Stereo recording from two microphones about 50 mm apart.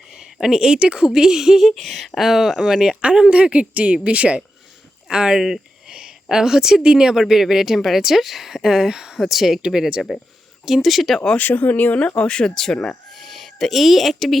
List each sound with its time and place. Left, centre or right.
0.2 s a woman's voice: centre; by 4.4 s right
5.1 s speech: centre
10.8 s speech: centre
11.3 s speech: left
12.3 s speech: centre
13.1 s speech: centre